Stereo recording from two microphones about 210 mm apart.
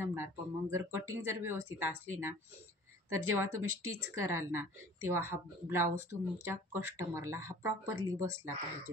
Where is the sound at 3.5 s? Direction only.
90° right.